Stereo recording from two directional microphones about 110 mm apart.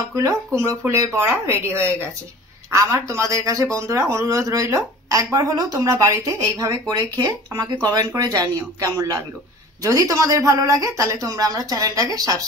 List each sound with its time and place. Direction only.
0.1 s speech: 25° right (ahead or behind)